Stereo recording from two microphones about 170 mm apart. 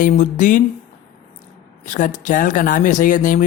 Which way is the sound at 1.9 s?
50° left (ahead or behind).